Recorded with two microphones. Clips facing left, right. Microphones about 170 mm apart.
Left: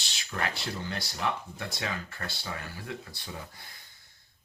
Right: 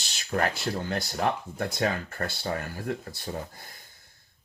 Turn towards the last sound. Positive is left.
turn(degrees=-45)  # may be behind; listen again after turning